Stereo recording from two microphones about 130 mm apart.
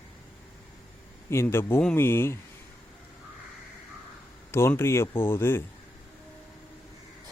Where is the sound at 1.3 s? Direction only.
20° left (ahead or behind).